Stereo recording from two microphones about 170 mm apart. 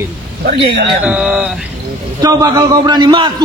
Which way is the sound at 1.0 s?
5° right (ahead or behind).